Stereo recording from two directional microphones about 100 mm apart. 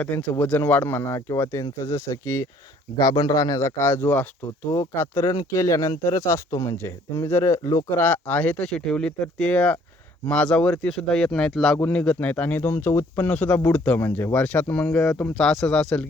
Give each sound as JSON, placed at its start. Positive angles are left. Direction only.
{"t": 0.0, "sound": "speech", "side_deg": 10}
{"t": 3.0, "sound": "speech", "side_deg": 40}
{"t": 7.9, "sound": "speech", "side_deg": 15}